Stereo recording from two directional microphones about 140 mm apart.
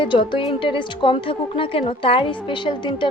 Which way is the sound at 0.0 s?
35° left (ahead or behind).